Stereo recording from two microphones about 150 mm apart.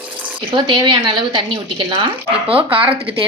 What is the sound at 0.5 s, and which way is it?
Speech, 30° right (ahead or behind).